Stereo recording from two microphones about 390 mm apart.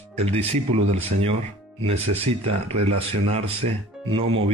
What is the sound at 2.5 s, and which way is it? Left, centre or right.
Speech, centre.